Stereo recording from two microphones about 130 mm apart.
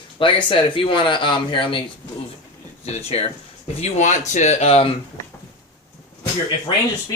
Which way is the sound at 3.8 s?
65° left (ahead or behind).